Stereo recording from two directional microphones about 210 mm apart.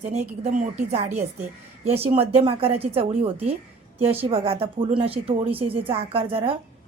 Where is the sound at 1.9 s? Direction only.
30° right (ahead or behind).